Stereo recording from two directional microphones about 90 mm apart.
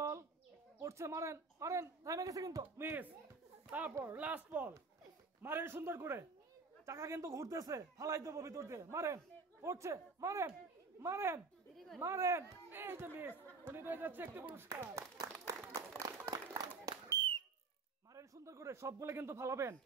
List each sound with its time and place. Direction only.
0.7 s speech: 35° right (ahead or behind)
2.8 s a man's voice: 25° right (ahead or behind)
15.4 s a sound: 40° right (ahead or behind); by 17.5 s 60° right (ahead or behind)
18.1 s speech: 35° right (ahead or behind)